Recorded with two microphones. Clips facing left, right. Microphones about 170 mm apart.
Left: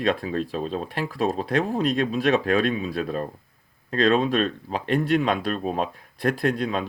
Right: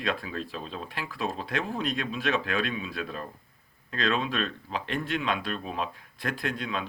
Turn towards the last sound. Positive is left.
turn(degrees=35)  # may be behind; listen again after turning